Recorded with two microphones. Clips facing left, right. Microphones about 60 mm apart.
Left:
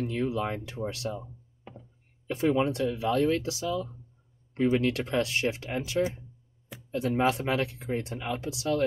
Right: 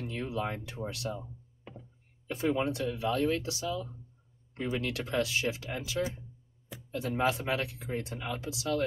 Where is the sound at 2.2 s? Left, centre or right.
Left.